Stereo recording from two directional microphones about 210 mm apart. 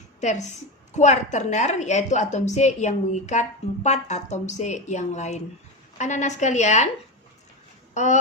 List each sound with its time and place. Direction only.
0.2 s a woman's voice: 35° left (ahead or behind)